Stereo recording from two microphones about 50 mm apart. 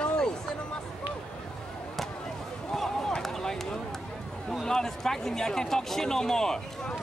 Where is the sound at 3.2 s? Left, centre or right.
Centre.